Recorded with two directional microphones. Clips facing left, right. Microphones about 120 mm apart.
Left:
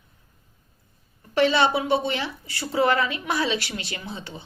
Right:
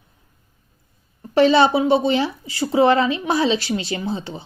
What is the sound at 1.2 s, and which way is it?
Speech, 30° right (ahead or behind).